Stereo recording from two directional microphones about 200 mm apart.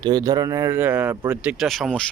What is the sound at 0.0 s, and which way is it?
Speech, 20° right (ahead or behind).